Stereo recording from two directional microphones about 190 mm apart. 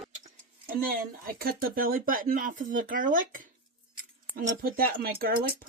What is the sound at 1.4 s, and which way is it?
Speech, 50° right (ahead or behind).